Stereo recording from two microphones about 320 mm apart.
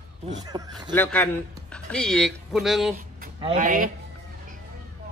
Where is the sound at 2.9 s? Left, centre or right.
Right.